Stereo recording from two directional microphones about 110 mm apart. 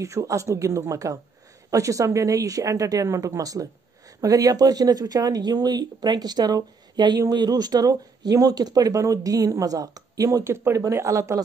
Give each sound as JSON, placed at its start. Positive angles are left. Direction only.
{"t": 0.0, "sound": "a woman's voice", "side_deg": -30}